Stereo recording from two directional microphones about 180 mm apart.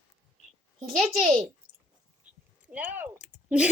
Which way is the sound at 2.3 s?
5° right (ahead or behind).